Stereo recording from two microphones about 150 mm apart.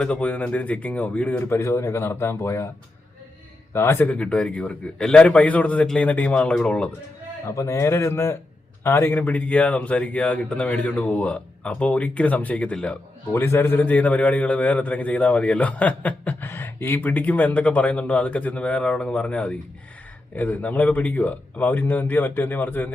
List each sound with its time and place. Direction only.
0.0 s a man's voice: 10° left (ahead or behind)
3.7 s a man's voice: 15° left (ahead or behind)
7.5 s a man's voice: 20° left (ahead or behind)